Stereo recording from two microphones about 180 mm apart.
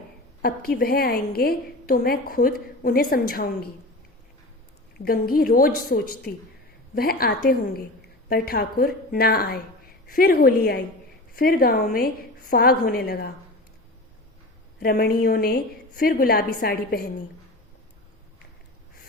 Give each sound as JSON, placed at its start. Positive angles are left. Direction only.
{"t": 0.4, "sound": "a woman's voice", "side_deg": 55}
{"t": 5.0, "sound": "a woman's voice", "side_deg": 55}
{"t": 14.8, "sound": "a woman's voice", "side_deg": 55}